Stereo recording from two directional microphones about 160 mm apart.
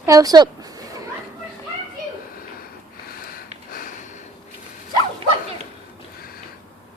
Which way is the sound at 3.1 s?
65° left (ahead or behind).